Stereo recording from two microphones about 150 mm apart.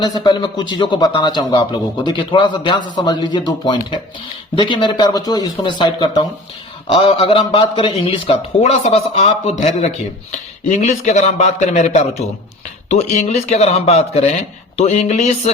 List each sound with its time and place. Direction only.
0.0 s a man's voice: 25° left (ahead or behind); by 15.5 s 50° left (ahead or behind)